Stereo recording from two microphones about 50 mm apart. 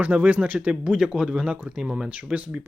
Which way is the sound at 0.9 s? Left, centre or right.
Centre.